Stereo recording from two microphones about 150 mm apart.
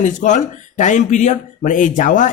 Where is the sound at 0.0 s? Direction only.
55° left (ahead or behind).